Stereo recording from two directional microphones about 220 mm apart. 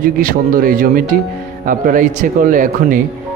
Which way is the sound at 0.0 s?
40° right (ahead or behind).